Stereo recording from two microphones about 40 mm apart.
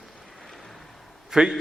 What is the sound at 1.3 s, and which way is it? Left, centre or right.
Speech, centre.